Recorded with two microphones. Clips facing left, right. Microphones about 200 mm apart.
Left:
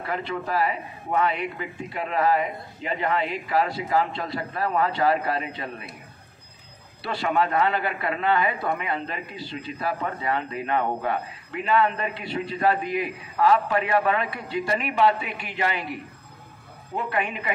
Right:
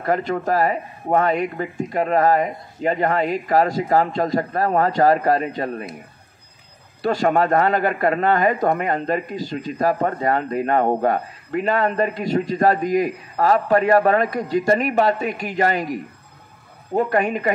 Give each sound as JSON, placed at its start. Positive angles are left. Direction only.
{"t": 0.0, "sound": "speech", "side_deg": -45}
{"t": 7.0, "sound": "speech", "side_deg": -45}